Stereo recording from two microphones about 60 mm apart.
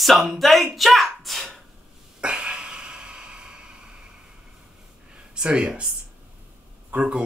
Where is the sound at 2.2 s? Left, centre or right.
Centre.